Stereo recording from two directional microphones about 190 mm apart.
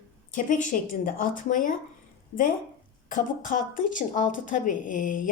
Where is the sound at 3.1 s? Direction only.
45° left (ahead or behind).